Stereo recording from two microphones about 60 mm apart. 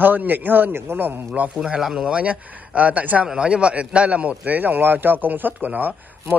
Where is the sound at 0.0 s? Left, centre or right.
Right.